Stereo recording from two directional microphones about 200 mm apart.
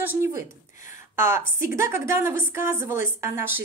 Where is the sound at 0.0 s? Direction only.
10° right (ahead or behind).